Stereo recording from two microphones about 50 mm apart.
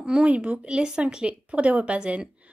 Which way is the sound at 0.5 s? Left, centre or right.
Centre.